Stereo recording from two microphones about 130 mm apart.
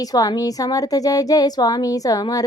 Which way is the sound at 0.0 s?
30° left (ahead or behind).